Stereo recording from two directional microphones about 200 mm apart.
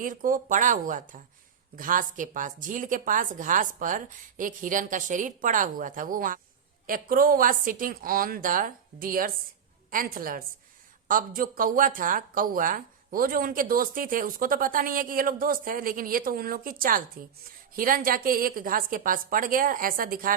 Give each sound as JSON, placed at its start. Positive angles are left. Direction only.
{"t": 0.0, "sound": "a woman's voice", "side_deg": -45}